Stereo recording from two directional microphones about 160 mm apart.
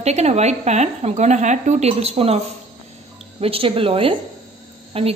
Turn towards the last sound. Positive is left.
turn(degrees=-35)  # may be behind; listen again after turning